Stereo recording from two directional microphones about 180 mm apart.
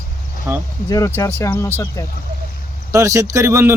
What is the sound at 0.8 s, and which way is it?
Speech, 20° left (ahead or behind).